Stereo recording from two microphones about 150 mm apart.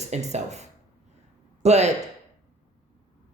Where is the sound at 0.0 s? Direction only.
50° right (ahead or behind).